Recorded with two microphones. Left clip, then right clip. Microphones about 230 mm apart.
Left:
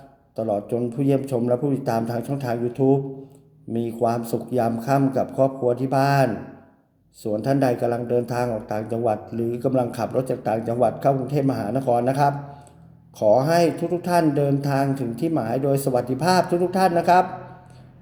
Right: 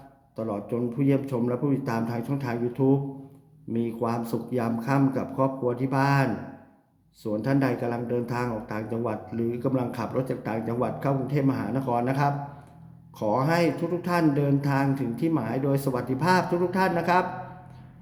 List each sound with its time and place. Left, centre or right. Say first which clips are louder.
0.3 s speech: left 6 dB; centre
3.7 s speech: left 6 dB; centre